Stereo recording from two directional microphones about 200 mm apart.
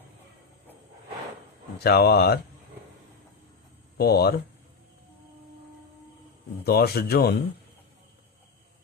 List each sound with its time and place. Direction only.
1.8 s speech: 50° left (ahead or behind)
3.9 s speech: 50° left (ahead or behind)
6.7 s speech: 50° left (ahead or behind)